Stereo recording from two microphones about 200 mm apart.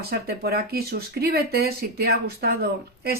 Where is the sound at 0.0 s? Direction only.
50° right (ahead or behind).